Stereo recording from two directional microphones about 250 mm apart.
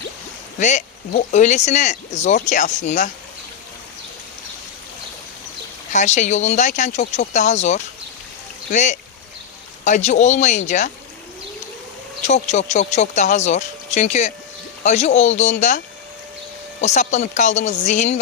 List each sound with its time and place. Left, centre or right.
0.6 s speech: left
5.9 s speech: left
12.2 s speech: left
16.8 s speech: left